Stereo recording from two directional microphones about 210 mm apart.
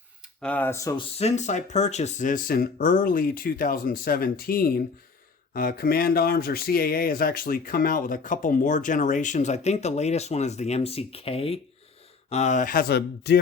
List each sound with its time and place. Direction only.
0.4 s speech: 10° left (ahead or behind)
1.1 s speech: 30° left (ahead or behind); by 13.4 s 50° left (ahead or behind)